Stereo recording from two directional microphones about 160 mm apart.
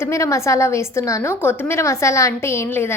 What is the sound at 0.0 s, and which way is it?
A woman's voice, 20° left (ahead or behind).